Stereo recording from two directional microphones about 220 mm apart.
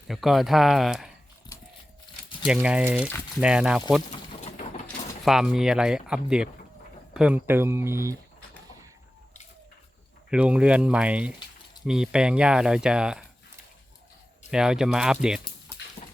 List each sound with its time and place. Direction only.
0.1 s speech: centre (ahead or behind)
2.5 s speech: 5° right (ahead or behind)
4.1 s pigeon: 30° left (ahead or behind)
4.9 s speech: centre (ahead or behind)
10.2 s speech: 5° right (ahead or behind)
14.5 s speech: 5° right (ahead or behind)
16.0 s dog: 30° left (ahead or behind)